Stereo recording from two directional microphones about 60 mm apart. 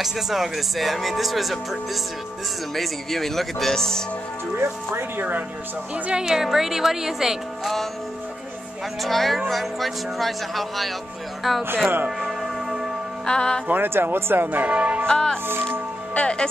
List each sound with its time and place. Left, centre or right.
0.0 s speech: centre
4.6 s speech: right
5.9 s a woman's voice: right
6.2 s speech: centre
9.0 s speech: centre
12.2 s music: centre
13.2 s music: centre
13.7 s speech: right
15.0 s music: centre